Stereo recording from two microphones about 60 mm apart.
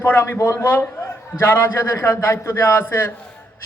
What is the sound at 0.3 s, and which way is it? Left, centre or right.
A man's voice, left.